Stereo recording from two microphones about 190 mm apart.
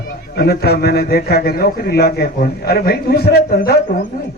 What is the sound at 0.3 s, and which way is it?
A man's voice, 55° left (ahead or behind).